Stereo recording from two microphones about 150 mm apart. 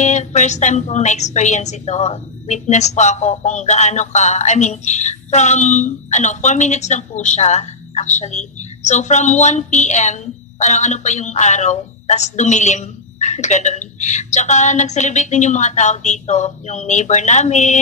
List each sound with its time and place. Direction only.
0.0 s a woman's voice: 50° left (ahead or behind)